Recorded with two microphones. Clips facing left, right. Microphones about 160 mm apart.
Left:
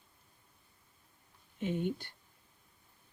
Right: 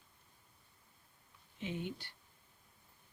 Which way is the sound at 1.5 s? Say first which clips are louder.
Left 7 dB; 50° left (ahead or behind).